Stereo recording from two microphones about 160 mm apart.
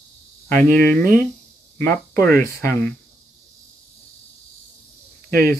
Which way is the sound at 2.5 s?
15° left (ahead or behind).